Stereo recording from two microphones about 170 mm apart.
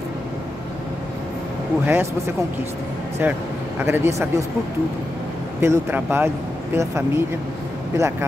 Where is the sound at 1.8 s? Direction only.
15° right (ahead or behind).